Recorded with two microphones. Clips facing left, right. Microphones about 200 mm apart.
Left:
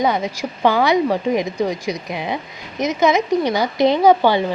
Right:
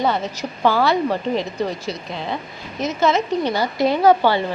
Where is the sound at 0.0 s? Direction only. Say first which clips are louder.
Left 2 dB; 15° left (ahead or behind).